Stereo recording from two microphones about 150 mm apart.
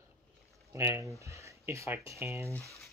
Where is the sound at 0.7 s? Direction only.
20° right (ahead or behind).